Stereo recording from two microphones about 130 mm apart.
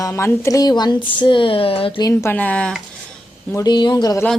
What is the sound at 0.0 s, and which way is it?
Speech, 20° left (ahead or behind).